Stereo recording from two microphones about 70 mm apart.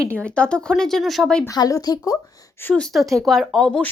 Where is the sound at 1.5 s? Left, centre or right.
Left.